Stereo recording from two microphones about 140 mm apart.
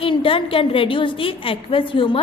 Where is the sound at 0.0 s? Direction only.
40° left (ahead or behind).